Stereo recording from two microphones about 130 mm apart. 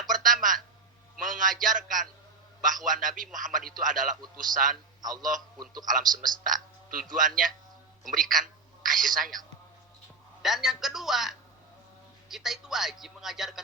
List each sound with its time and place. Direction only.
0.1 s a sound: 90° right
1.2 s a man's voice: 90° right
5.5 s speech: 30° right (ahead or behind)
5.9 s a man's voice: 90° right
8.8 s a sound: 90° right
10.4 s speech: 5° right (ahead or behind)